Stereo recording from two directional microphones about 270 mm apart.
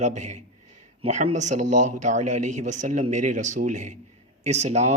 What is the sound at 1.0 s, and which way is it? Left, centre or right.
Speech, right.